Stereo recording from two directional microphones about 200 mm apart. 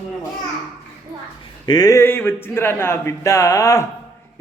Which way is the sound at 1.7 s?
20° left (ahead or behind).